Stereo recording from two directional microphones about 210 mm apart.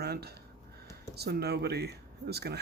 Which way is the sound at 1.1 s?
50° right (ahead or behind).